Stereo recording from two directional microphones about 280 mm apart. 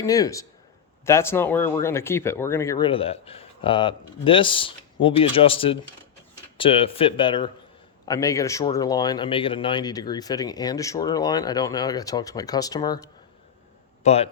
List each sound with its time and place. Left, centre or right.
0.0 s a man's voice: centre